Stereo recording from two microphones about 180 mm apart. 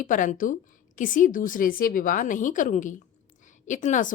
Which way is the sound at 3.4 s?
45° left (ahead or behind).